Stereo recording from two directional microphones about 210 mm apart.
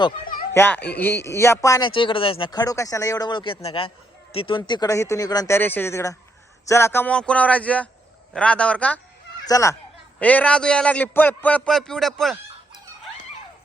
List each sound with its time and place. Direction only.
0.5 s a man's voice: 10° left (ahead or behind)